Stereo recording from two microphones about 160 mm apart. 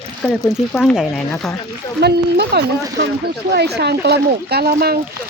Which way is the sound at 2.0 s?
90° right.